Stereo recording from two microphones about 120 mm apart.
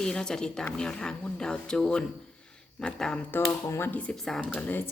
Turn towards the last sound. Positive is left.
turn(degrees=15)  # may be behind; listen again after turning